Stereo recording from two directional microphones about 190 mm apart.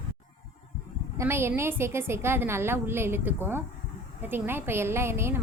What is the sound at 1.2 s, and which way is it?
A woman's voice, 15° right (ahead or behind).